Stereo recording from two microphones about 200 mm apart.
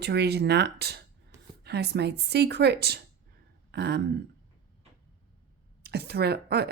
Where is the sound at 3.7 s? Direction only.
50° right (ahead or behind).